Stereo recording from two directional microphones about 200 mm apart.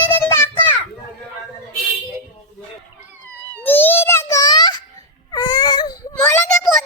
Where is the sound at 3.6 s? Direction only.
10° left (ahead or behind).